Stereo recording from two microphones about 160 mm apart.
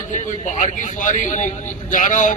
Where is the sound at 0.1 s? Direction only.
50° left (ahead or behind).